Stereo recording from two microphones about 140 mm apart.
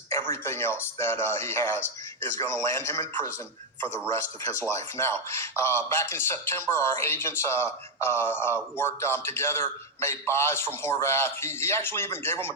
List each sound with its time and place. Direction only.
0.1 s speech: 20° left (ahead or behind)